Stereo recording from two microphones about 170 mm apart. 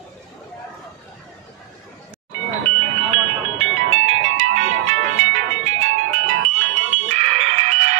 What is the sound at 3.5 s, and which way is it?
Music, 40° right (ahead or behind).